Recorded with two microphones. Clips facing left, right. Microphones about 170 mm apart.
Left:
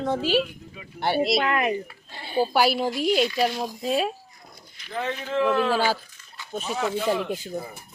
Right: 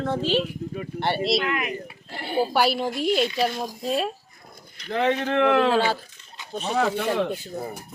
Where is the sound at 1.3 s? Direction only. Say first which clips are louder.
Left 2 dB; 45° left (ahead or behind).